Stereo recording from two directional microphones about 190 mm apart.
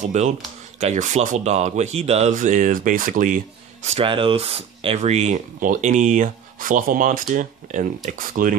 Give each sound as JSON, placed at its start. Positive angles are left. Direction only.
{"t": 0.0, "sound": "speech", "side_deg": -35}